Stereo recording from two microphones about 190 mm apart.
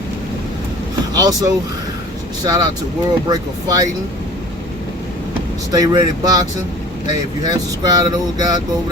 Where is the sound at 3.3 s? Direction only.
20° right (ahead or behind).